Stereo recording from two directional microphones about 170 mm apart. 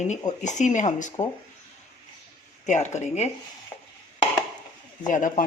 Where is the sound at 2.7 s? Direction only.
45° left (ahead or behind).